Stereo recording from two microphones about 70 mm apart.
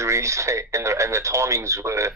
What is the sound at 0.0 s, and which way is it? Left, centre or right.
Speech, right.